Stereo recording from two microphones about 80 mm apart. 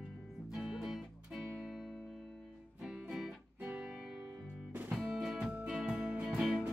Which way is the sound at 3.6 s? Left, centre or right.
Centre.